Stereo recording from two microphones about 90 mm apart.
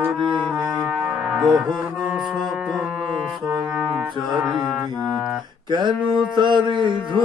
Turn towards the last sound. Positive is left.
turn(degrees=-60)  # may be behind; listen again after turning